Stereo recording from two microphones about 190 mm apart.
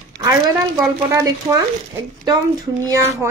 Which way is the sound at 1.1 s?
15° right (ahead or behind).